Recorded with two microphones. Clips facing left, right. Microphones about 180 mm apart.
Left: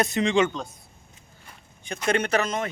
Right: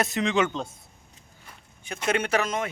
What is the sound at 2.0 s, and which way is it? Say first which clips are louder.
Speech: left 1 dB; 5° right (ahead or behind).